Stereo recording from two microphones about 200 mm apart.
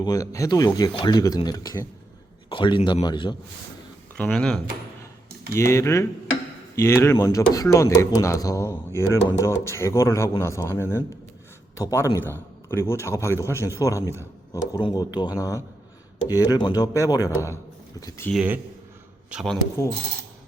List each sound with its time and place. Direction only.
0.0 s speech: 15° left (ahead or behind)
4.2 s speech: 5° left (ahead or behind)
18.3 s a man's voice: 5° right (ahead or behind)